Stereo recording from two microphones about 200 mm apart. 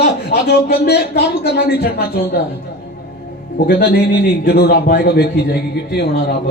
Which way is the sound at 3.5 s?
55° left (ahead or behind).